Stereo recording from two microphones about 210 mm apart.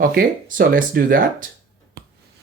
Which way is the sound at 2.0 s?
45° right (ahead or behind).